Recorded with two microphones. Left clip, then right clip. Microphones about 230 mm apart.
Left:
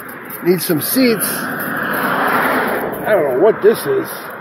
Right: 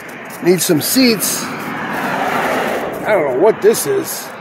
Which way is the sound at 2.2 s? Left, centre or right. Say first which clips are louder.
Left 1 dB; right.